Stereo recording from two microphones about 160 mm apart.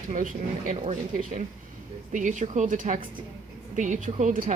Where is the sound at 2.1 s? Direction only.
50° right (ahead or behind).